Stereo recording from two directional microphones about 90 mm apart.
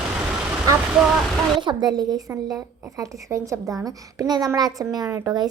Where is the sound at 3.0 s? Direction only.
35° right (ahead or behind).